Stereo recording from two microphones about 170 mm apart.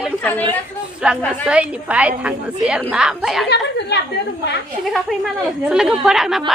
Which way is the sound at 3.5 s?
85° left.